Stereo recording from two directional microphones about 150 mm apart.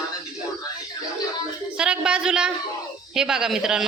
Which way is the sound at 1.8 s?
5° right (ahead or behind).